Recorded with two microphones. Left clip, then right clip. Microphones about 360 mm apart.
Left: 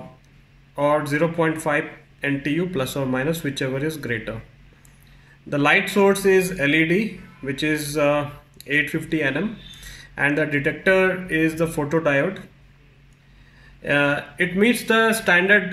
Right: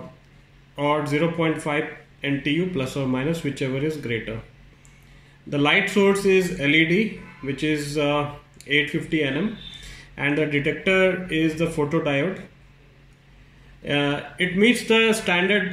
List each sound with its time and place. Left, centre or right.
0.7 s speech: left
5.5 s speech: left
13.8 s speech: left